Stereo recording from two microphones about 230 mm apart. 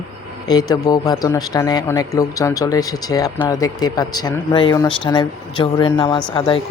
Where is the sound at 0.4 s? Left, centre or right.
Centre.